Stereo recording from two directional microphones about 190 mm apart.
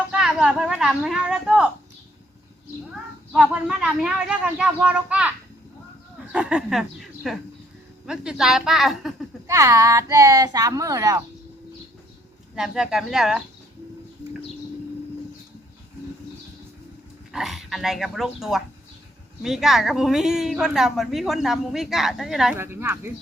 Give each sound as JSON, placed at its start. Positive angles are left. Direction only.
{"t": 0.1, "sound": "a woman's voice", "side_deg": -5}
{"t": 3.3, "sound": "a woman's voice", "side_deg": -5}
{"t": 6.3, "sound": "a woman's voice", "side_deg": -5}
{"t": 9.5, "sound": "a child's voice", "side_deg": -15}
{"t": 12.5, "sound": "a woman's voice", "side_deg": -5}
{"t": 17.3, "sound": "a woman's voice", "side_deg": 0}
{"t": 22.5, "sound": "a child's voice", "side_deg": -10}